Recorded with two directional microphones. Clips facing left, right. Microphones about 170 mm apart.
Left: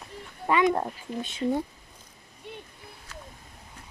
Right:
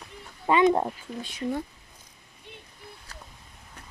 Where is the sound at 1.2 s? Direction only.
25° left (ahead or behind).